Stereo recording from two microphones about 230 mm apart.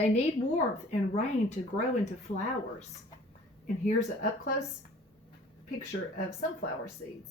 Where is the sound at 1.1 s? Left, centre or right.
Left.